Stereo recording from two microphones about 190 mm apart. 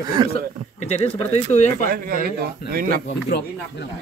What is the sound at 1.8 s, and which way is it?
Speech, 50° right (ahead or behind).